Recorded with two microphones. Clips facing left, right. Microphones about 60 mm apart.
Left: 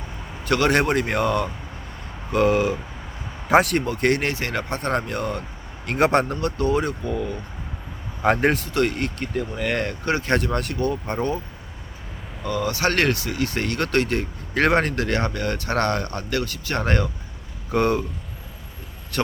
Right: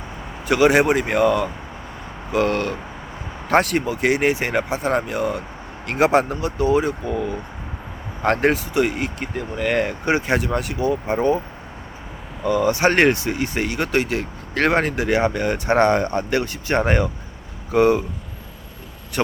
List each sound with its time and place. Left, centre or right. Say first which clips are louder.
0.4 s speech: right 4 dB; centre
4.7 s speech: right 3 dB; centre
10.1 s speech: right 2 dB; centre
10.3 s speech: right 1 dB; centre
12.4 s speech: right 6 dB; centre
17.7 s speech: right 5 dB; centre